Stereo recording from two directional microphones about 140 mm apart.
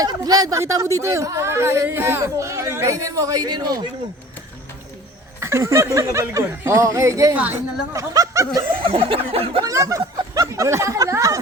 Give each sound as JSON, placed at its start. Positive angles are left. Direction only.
{"t": 0.0, "sound": "speech", "side_deg": -25}
{"t": 5.4, "sound": "speech", "side_deg": -20}
{"t": 7.3, "sound": "a woman's voice", "side_deg": -10}
{"t": 7.9, "sound": "speech", "side_deg": -25}
{"t": 8.8, "sound": "a sound", "side_deg": -40}
{"t": 9.6, "sound": "speech", "side_deg": -25}